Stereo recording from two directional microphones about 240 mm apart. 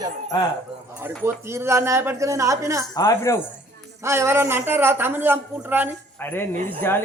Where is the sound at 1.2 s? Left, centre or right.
Centre.